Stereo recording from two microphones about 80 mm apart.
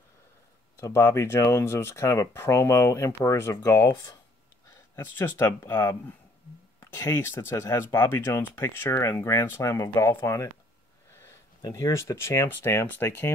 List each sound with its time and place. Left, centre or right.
0.7 s speech: left
3.8 s speech: left
4.9 s speech: left
7.1 s speech: left
11.6 s speech: left